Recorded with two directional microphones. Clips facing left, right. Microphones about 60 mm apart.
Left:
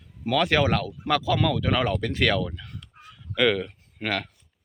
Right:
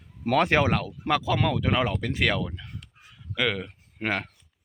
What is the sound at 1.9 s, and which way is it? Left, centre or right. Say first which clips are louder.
Speech: left 2 dB; centre.